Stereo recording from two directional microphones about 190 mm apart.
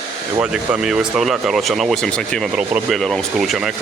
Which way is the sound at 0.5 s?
5° right (ahead or behind).